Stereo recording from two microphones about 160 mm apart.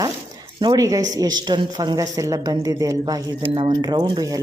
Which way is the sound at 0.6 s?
25° right (ahead or behind).